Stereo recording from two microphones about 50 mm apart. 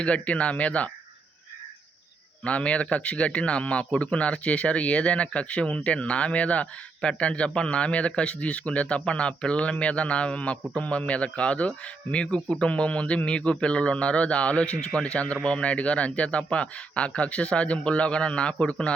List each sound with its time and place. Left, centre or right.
0.0 s a man's voice: left
2.4 s a man's voice: left